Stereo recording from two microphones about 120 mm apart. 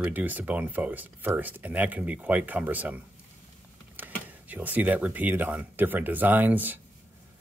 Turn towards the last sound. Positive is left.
turn(degrees=-15)  # may be behind; listen again after turning